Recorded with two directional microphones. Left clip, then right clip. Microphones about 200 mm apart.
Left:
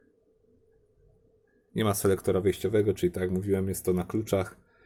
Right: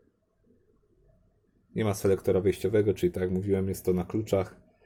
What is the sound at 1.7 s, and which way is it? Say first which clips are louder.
Speech: even; 15° left (ahead or behind).